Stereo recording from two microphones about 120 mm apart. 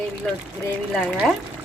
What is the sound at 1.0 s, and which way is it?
Speech, 5° right (ahead or behind).